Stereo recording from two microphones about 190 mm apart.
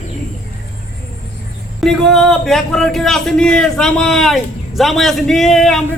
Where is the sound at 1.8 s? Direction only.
Centre (ahead or behind).